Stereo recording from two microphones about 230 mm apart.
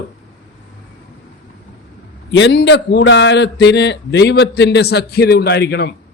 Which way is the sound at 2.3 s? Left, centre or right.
Left.